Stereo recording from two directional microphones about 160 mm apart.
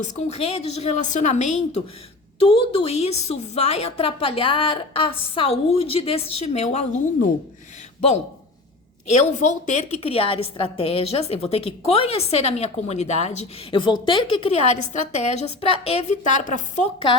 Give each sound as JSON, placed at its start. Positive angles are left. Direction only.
{"t": 0.0, "sound": "a woman's voice", "side_deg": 45}
{"t": 2.4, "sound": "a woman's voice", "side_deg": 35}
{"t": 9.0, "sound": "a woman's voice", "side_deg": 45}